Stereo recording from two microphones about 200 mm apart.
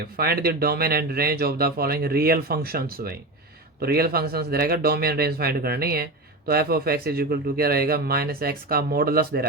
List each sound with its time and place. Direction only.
0.2 s speech: 50° right (ahead or behind)